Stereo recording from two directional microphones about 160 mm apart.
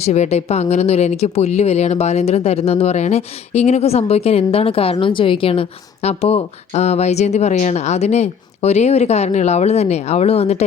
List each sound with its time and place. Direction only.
0.0 s speech: 45° left (ahead or behind)